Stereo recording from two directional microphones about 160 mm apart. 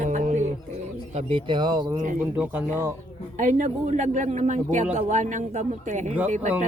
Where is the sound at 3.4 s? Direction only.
50° right (ahead or behind).